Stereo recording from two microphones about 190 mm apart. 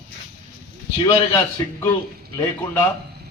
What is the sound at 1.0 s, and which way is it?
Speech, 25° left (ahead or behind).